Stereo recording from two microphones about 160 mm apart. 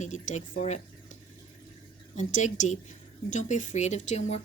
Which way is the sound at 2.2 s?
50° left (ahead or behind).